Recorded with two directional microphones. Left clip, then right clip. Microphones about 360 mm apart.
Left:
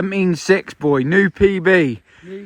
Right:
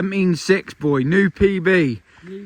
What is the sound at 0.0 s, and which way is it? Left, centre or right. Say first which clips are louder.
Speech: left 2 dB; centre.